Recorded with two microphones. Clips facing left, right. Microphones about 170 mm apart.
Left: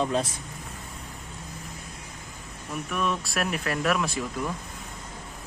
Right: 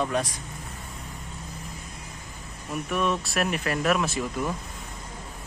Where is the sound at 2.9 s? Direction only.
Centre (ahead or behind).